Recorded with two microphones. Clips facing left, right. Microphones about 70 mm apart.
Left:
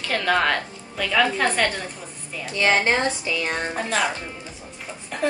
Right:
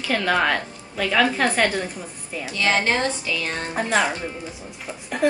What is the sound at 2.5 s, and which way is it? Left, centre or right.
Speech, left.